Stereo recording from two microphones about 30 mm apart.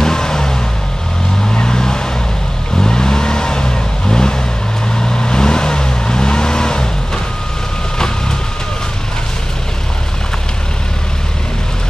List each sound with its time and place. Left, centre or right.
0.0 s vehicle: centre